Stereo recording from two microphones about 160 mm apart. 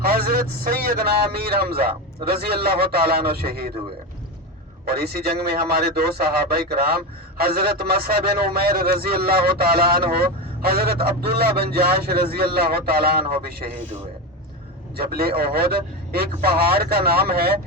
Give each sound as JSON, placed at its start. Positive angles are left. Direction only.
{"t": 0.0, "sound": "a man's voice", "side_deg": -70}
{"t": 4.9, "sound": "a man's voice", "side_deg": -80}
{"t": 14.9, "sound": "a man's voice", "side_deg": -75}